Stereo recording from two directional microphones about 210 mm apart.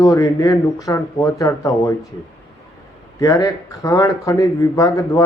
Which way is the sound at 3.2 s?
15° left (ahead or behind).